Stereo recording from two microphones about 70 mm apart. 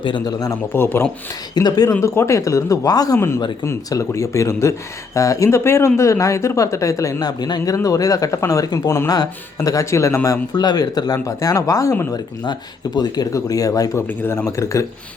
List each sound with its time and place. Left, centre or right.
0.3 s speech: left
0.7 s speech: left
1.5 s speech: left
1.9 s speech: left
2.9 s speech: left
3.2 s speech: left
3.6 s speech: left
7.2 s speech: left
10.5 s speech: left
11.2 s speech: left
12.1 s speech: left
13.3 s speech: left
14.1 s a man's voice: left
14.5 s speech: left